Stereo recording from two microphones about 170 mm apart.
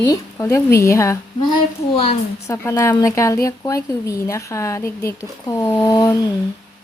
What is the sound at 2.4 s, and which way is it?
A woman's voice, 15° left (ahead or behind).